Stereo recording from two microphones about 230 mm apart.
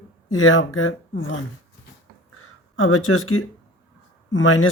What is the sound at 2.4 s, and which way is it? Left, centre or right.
Speech, left.